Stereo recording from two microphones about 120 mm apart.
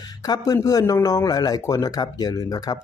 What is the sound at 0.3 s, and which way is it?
Speech, 30° left (ahead or behind).